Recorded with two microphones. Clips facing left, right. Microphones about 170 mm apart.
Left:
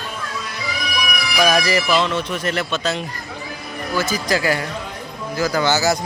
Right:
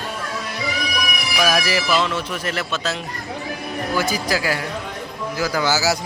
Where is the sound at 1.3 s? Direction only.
5° right (ahead or behind).